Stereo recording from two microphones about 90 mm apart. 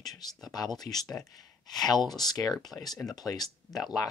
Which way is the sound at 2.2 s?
45° left (ahead or behind).